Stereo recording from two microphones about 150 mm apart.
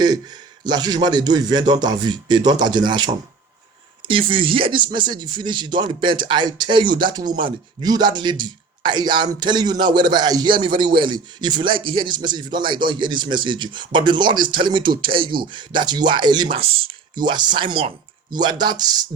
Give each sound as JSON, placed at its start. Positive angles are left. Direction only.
{"t": 0.6, "sound": "speech", "side_deg": -25}